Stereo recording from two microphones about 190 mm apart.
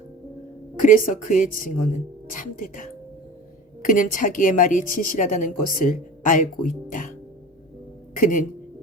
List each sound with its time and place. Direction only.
0.8 s a woman's voice: 45° left (ahead or behind)
8.1 s speech: 45° left (ahead or behind)